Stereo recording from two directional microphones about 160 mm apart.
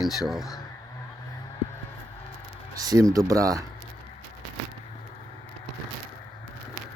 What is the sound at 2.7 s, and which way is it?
Speech, 20° right (ahead or behind).